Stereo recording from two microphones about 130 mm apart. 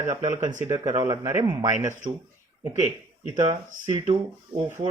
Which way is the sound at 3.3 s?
35° right (ahead or behind).